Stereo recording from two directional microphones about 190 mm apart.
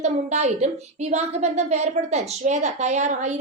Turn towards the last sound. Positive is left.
turn(degrees=-40)  # may be behind; listen again after turning